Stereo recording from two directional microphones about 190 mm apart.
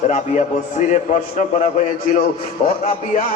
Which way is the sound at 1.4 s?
40° left (ahead or behind).